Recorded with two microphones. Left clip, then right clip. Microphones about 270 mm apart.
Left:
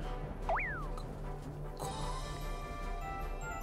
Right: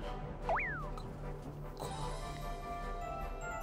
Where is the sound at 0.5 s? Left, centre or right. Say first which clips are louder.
Even; centre.